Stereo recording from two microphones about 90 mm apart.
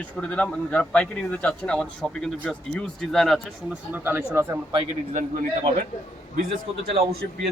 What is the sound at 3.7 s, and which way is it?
Speech, 20° right (ahead or behind).